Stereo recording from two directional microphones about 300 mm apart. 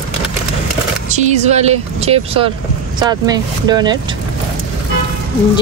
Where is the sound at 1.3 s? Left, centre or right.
Right.